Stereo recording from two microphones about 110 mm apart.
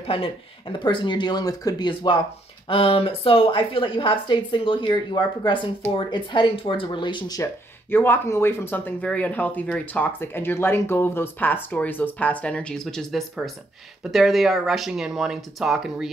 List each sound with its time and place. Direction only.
0.0 s a woman's voice: 55° left (ahead or behind)
7.9 s speech: 20° left (ahead or behind); by 16.1 s 5° right (ahead or behind)